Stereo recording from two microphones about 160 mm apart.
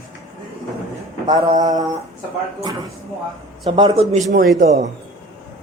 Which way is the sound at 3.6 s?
30° right (ahead or behind).